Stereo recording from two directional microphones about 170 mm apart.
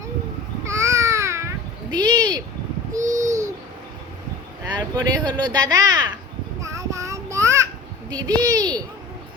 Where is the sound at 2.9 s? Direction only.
45° right (ahead or behind).